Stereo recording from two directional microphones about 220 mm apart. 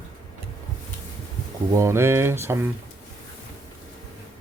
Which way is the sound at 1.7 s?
10° right (ahead or behind).